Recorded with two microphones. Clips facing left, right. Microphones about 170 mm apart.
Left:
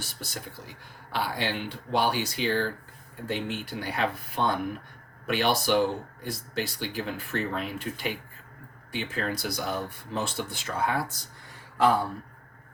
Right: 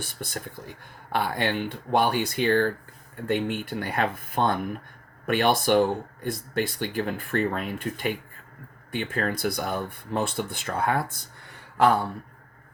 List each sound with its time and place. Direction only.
0.0 s speech: 55° right (ahead or behind)